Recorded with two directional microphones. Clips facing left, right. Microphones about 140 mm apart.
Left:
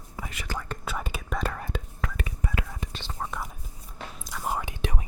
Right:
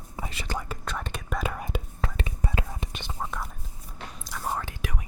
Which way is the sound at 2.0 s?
25° right (ahead or behind).